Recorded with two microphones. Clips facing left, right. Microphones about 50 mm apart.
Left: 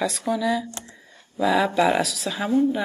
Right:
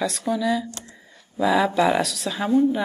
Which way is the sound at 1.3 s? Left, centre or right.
Centre.